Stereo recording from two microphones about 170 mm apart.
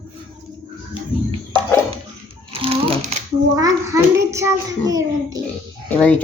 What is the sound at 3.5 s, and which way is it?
A child's voice, 20° right (ahead or behind).